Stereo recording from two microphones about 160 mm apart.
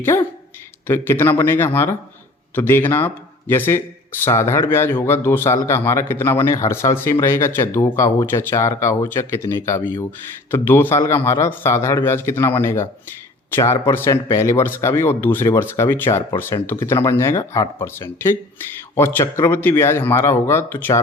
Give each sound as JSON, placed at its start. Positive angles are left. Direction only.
{"t": 0.9, "sound": "speech", "side_deg": 15}